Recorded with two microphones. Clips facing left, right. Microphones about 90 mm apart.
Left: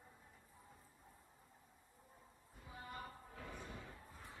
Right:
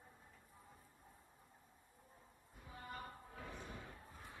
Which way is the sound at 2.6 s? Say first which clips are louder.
Even; 15° left (ahead or behind).